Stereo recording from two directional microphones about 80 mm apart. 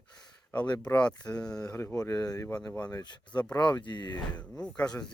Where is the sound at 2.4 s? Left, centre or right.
Centre.